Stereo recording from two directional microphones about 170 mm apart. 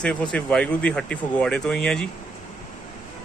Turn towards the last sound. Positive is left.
turn(degrees=5)  # may be behind; listen again after turning